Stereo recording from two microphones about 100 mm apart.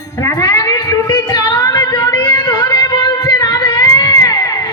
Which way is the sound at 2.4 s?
45° left (ahead or behind).